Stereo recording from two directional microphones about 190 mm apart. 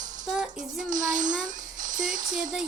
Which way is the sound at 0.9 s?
40° right (ahead or behind).